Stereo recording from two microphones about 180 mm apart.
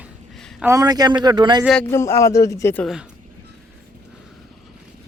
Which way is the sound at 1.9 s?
15° left (ahead or behind).